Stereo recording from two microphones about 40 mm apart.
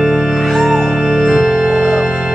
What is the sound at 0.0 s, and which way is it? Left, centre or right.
Music, centre.